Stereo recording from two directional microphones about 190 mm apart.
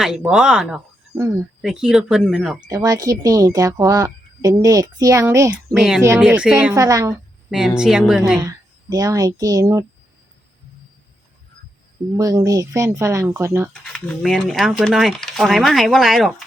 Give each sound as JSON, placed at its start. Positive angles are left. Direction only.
{"t": 0.0, "sound": "speech", "side_deg": -5}
{"t": 1.1, "sound": "speech", "side_deg": -15}
{"t": 1.6, "sound": "speech", "side_deg": -5}
{"t": 2.6, "sound": "a woman's voice", "side_deg": -20}
{"t": 6.7, "sound": "a woman's voice", "side_deg": -20}
{"t": 7.8, "sound": "speech", "side_deg": -5}
{"t": 8.4, "sound": "speech", "side_deg": -20}
{"t": 12.1, "sound": "a woman's voice", "side_deg": -20}
{"t": 13.9, "sound": "speech", "side_deg": 0}